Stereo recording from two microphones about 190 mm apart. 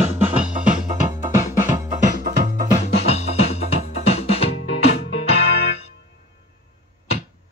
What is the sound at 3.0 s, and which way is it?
Music, 35° left (ahead or behind).